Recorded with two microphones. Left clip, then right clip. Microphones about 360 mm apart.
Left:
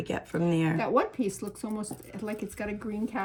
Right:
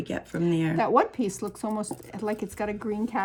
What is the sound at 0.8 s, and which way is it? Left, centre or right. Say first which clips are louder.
Speech: right 8 dB; right.